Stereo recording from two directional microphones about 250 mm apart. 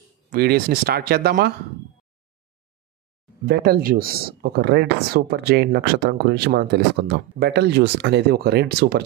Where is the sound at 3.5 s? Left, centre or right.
Right.